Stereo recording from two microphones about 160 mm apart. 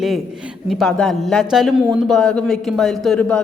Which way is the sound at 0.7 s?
Centre (ahead or behind).